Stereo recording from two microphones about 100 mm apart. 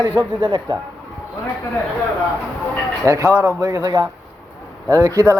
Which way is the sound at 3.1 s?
35° right (ahead or behind).